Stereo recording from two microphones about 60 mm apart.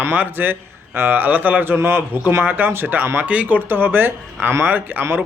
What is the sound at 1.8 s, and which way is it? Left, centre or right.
A man's voice, right.